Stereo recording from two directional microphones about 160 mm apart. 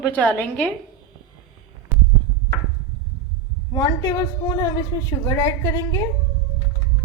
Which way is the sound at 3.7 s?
20° left (ahead or behind).